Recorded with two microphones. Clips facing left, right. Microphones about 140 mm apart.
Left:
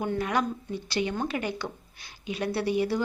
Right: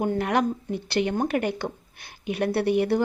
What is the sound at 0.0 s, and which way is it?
Speech, 55° right (ahead or behind).